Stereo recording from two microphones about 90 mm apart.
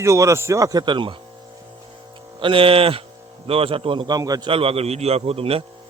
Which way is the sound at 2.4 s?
80° right.